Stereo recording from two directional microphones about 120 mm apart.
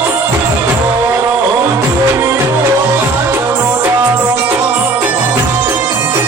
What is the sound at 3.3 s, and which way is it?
Music, 20° right (ahead or behind).